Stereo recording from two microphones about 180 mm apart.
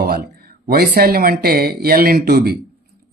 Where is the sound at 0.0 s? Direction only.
55° right (ahead or behind).